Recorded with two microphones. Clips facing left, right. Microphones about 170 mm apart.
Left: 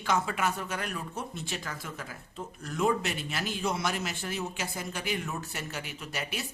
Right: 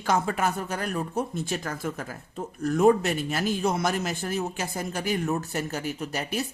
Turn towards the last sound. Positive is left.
turn(degrees=-40)  # may be behind; listen again after turning